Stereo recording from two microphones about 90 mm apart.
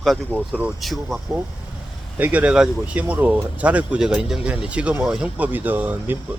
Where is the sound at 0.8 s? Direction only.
Centre (ahead or behind).